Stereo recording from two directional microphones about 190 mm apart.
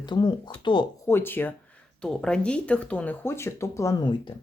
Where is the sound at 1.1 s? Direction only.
10° left (ahead or behind).